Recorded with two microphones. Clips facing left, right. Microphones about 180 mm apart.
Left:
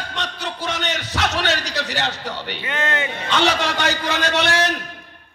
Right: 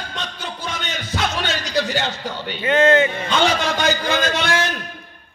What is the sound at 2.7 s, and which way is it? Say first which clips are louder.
Speech: right 11 dB; 40° right (ahead or behind).